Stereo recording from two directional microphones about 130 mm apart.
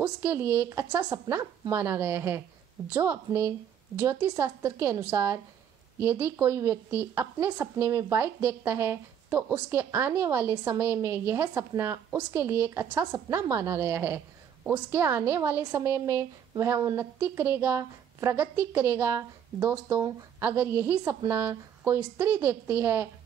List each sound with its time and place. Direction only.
0.0 s a woman's voice: 15° right (ahead or behind)